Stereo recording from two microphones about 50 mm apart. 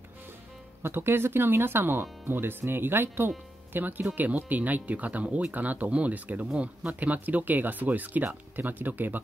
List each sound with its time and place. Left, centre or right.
0.8 s speech: right